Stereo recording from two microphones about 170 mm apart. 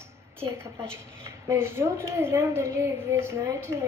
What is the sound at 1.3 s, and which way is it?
A woman's voice, 15° right (ahead or behind).